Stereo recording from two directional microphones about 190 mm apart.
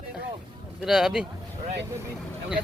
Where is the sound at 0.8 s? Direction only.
Centre (ahead or behind).